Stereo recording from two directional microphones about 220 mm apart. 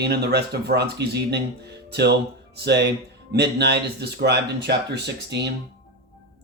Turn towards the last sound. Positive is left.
turn(degrees=-50)  # may be behind; listen again after turning